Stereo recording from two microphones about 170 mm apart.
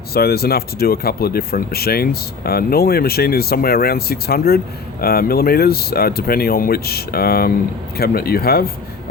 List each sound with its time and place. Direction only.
0.1 s speech: 65° left (ahead or behind)